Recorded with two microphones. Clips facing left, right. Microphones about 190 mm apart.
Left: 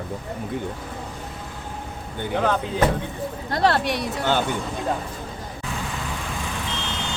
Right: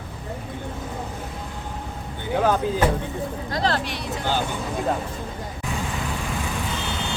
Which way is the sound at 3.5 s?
60° left (ahead or behind).